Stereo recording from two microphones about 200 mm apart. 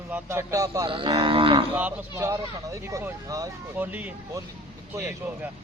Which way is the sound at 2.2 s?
15° right (ahead or behind).